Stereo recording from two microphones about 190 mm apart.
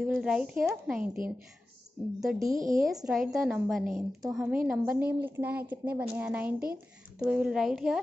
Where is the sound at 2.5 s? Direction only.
45° right (ahead or behind).